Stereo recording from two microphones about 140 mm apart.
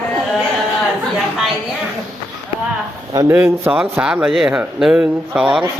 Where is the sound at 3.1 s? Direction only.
25° right (ahead or behind).